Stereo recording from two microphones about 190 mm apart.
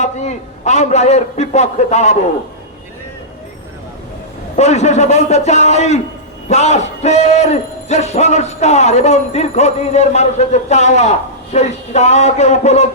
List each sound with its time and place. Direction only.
0.0 s a man's voice: 35° left (ahead or behind)
4.5 s a man's voice: 35° left (ahead or behind)